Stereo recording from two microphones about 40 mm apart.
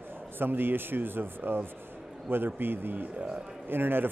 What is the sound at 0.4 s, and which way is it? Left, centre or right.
A man's voice, right.